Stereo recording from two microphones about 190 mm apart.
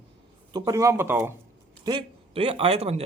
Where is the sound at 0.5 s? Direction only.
20° right (ahead or behind).